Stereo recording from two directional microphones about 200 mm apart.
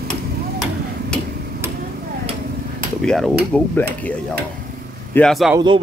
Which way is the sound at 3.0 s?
5° left (ahead or behind).